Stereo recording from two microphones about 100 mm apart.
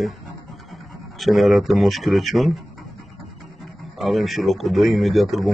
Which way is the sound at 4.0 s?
Centre (ahead or behind).